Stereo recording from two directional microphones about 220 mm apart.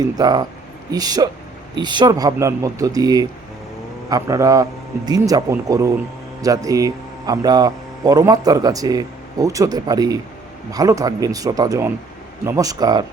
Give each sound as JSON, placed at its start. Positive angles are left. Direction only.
{"t": 0.2, "sound": "speech", "side_deg": -20}